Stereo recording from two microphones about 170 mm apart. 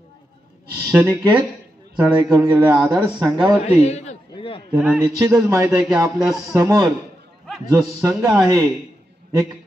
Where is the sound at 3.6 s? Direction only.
40° left (ahead or behind).